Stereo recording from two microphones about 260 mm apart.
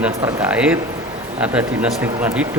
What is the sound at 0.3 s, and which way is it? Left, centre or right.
A man's voice, centre.